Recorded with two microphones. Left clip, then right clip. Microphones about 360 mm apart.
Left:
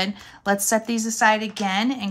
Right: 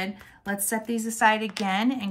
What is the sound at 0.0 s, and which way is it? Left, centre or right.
A woman's voice, centre.